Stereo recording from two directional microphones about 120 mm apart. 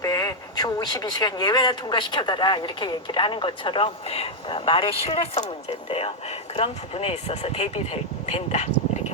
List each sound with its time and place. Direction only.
0.0 s speech: 30° left (ahead or behind); by 8.6 s 65° left (ahead or behind)